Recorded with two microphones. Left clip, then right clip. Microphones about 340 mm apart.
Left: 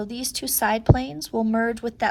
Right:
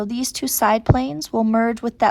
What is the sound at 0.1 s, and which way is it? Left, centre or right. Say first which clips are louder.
A woman's voice: right 4 dB; centre.